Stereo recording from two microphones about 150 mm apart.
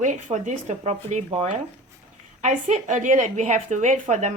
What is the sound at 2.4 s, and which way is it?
A woman's voice, 55° right (ahead or behind).